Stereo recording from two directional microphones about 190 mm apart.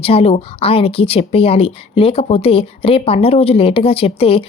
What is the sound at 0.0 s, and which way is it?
Speech, 30° left (ahead or behind).